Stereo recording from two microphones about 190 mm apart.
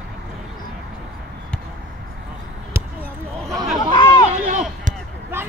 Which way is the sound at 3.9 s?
20° left (ahead or behind).